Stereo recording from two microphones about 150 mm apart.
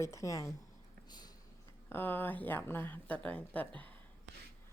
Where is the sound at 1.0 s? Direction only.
30° left (ahead or behind).